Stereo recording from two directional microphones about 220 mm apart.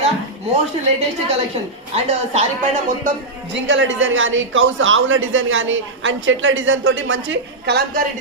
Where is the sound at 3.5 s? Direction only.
55° right (ahead or behind).